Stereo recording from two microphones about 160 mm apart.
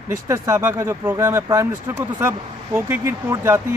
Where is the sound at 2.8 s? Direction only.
15° right (ahead or behind).